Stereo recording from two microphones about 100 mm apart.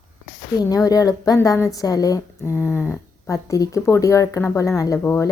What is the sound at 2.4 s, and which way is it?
Speech, 25° left (ahead or behind).